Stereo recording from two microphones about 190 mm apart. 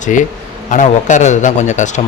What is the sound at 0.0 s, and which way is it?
A man's voice, 40° left (ahead or behind).